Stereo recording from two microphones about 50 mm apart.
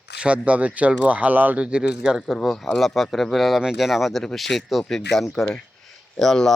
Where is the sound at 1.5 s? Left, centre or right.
Right.